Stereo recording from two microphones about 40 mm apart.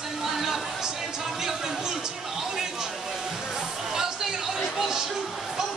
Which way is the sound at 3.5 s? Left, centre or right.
Centre.